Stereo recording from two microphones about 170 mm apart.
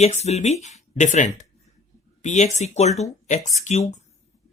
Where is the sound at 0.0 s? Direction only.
40° left (ahead or behind).